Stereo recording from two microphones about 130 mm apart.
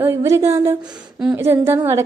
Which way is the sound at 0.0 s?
20° right (ahead or behind).